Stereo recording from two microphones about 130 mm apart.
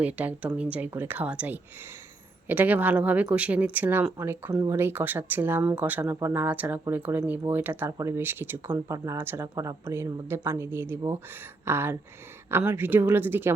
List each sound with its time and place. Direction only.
0.0 s speech: 10° right (ahead or behind)